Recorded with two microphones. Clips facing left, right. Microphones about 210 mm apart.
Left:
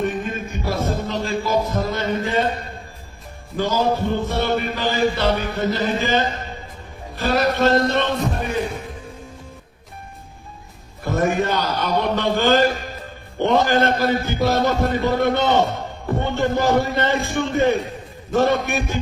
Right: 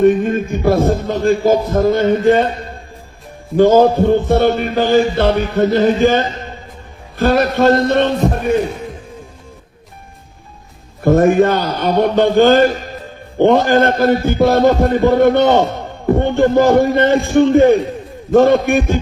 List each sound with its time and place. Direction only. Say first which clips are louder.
0.0 s a man's voice: right 12 dB; 50° right (ahead or behind)
3.6 s a man's voice: right 11 dB; 55° right (ahead or behind)
11.0 s a man's voice: right 10 dB; 50° right (ahead or behind)